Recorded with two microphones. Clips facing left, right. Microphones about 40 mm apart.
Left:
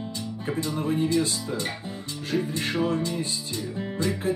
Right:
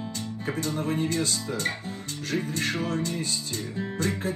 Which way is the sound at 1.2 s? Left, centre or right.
Left.